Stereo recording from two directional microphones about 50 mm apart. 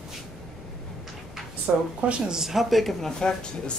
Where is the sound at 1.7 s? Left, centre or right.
Right.